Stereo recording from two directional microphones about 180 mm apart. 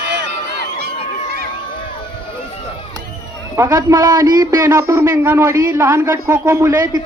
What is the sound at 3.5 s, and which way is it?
A man's voice, 20° right (ahead or behind).